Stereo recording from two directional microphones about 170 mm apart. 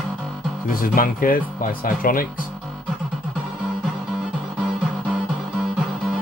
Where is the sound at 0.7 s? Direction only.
55° left (ahead or behind).